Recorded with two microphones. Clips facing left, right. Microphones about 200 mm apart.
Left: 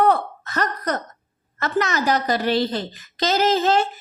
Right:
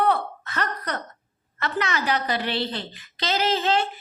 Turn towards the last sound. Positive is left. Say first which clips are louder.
# left 5 dB
turn(degrees=45)  # may be behind; listen again after turning